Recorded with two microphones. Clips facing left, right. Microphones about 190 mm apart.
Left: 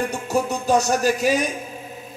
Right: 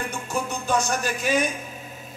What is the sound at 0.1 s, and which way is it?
Music, 40° left (ahead or behind).